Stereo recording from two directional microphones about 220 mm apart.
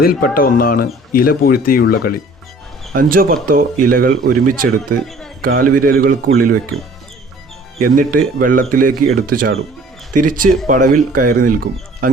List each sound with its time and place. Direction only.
0.0 s speech: 40° left (ahead or behind)
2.9 s speech: 40° right (ahead or behind)
7.8 s speech: 40° right (ahead or behind)